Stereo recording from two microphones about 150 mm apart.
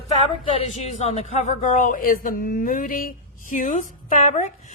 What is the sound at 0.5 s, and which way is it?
A woman's voice, 45° left (ahead or behind).